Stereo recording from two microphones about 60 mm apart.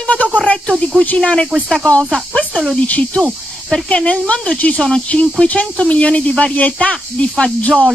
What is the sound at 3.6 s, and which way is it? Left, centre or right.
Speech, centre.